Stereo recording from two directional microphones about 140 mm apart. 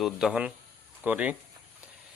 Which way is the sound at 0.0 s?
5° right (ahead or behind).